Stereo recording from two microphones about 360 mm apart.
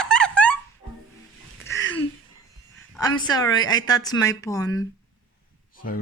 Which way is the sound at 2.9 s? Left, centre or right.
Centre.